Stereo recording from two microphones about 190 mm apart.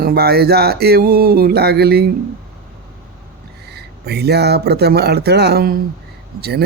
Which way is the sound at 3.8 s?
60° right (ahead or behind).